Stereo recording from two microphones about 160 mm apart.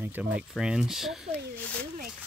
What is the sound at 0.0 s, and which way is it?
Speech, 10° right (ahead or behind).